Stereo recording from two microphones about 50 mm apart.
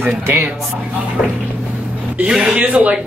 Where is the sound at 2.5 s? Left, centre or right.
Right.